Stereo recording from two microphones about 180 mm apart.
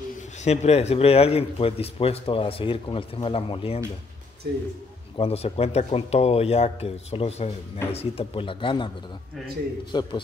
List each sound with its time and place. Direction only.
0.4 s speech: 40° left (ahead or behind)
5.1 s speech: 35° left (ahead or behind)
9.9 s speech: 25° left (ahead or behind)